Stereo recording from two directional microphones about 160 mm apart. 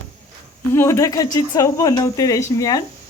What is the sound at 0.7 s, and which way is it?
A woman's voice, 15° left (ahead or behind).